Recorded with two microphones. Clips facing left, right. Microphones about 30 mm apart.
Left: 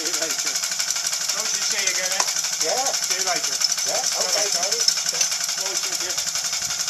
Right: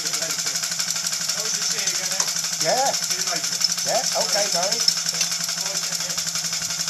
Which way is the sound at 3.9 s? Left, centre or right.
Centre.